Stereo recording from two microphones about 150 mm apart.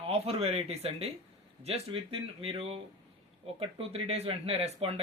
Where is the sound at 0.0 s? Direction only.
40° right (ahead or behind).